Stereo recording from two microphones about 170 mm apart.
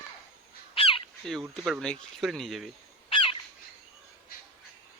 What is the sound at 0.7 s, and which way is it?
Crow, 35° left (ahead or behind).